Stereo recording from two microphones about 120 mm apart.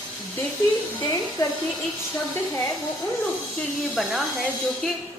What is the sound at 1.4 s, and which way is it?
Speech, 30° left (ahead or behind).